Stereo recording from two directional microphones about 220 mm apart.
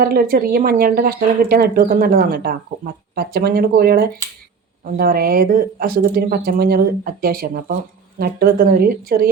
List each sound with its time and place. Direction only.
0.0 s speech: 45° right (ahead or behind)